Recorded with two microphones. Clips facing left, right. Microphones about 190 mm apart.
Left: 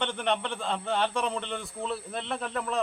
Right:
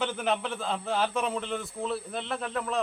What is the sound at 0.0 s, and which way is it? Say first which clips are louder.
A man's voice: even; 5° right (ahead or behind).